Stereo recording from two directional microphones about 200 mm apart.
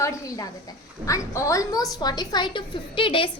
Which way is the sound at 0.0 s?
15° left (ahead or behind).